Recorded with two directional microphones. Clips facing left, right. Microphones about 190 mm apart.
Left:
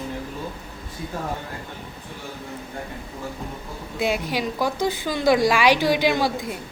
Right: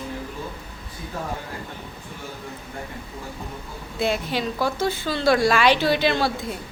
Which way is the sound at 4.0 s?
10° left (ahead or behind).